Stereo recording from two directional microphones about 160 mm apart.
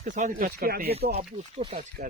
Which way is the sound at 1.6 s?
50° right (ahead or behind).